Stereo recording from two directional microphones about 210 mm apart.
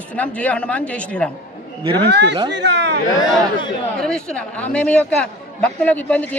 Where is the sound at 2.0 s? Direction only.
55° right (ahead or behind).